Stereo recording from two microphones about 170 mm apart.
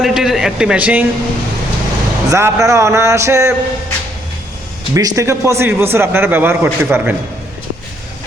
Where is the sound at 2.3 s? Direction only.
20° right (ahead or behind).